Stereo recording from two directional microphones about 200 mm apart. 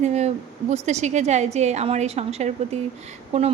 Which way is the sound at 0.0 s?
35° right (ahead or behind).